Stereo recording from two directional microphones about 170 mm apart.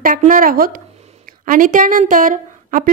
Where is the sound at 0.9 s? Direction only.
40° right (ahead or behind).